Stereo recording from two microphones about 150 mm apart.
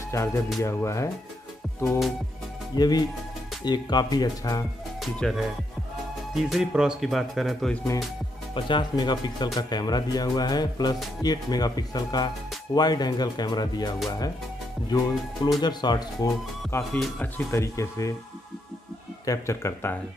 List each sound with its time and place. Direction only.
0.1 s speech: 20° left (ahead or behind)
1.9 s speech: centre (ahead or behind)
2.7 s speech: 25° left (ahead or behind)
5.0 s speech: centre (ahead or behind)
8.5 s speech: 30° left (ahead or behind)
16.7 s speech: 15° left (ahead or behind)
19.2 s speech: 20° left (ahead or behind)